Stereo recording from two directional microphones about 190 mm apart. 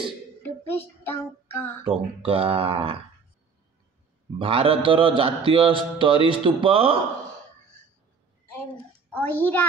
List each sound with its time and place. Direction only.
0.4 s child singing: 10° left (ahead or behind)
1.9 s speech: 30° right (ahead or behind)
4.4 s speech: 30° right (ahead or behind)
9.1 s child singing: 10° left (ahead or behind)